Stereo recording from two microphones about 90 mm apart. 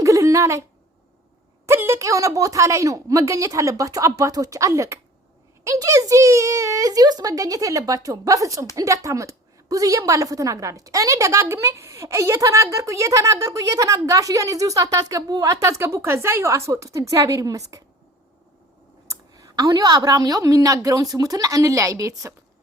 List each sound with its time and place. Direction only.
0.0 s a sound: 35° right (ahead or behind)
1.6 s a woman's voice: 30° right (ahead or behind)
15.6 s a woman's voice: 30° right (ahead or behind)
19.0 s a woman's voice: 40° right (ahead or behind)